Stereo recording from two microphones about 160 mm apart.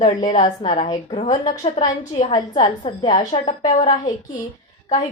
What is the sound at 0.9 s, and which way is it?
A woman's voice, 30° left (ahead or behind).